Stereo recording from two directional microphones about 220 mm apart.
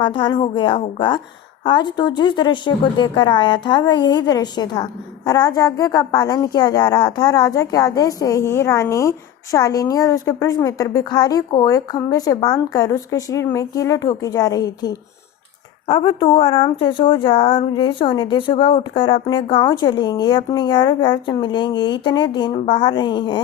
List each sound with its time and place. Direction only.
0.0 s speech: 20° left (ahead or behind)